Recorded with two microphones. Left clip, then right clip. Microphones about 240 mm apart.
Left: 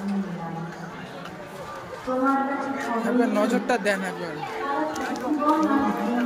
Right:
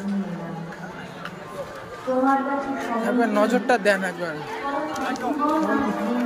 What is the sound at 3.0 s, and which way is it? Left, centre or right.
A man's voice, centre.